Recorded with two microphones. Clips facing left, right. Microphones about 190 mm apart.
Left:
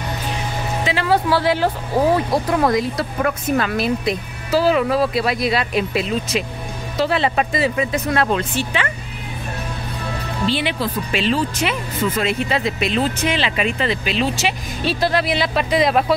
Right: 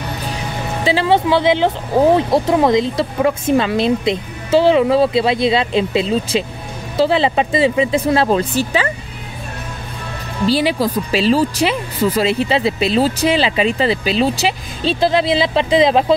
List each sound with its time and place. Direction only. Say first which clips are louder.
0.8 s speech: right 4 dB; 25° right (ahead or behind)
10.4 s speech: right 6 dB; 35° right (ahead or behind)